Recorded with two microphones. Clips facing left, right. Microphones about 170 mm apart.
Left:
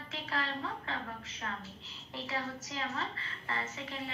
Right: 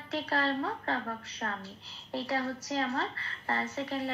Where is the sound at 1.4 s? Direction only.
45° right (ahead or behind).